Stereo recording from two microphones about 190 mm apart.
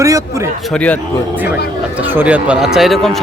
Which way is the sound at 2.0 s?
10° right (ahead or behind).